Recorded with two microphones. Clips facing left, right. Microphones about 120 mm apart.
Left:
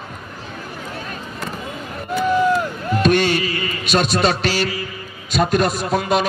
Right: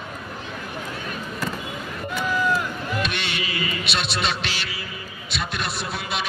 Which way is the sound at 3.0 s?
45° left (ahead or behind).